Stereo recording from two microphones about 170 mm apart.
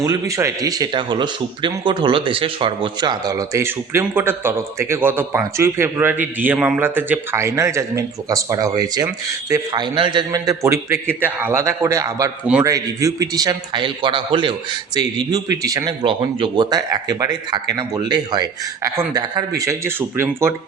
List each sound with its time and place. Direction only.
0.0 s a man's voice: 20° right (ahead or behind)